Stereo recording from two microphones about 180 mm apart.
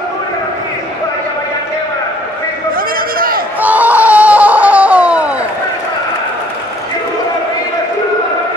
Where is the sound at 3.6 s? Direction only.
10° right (ahead or behind).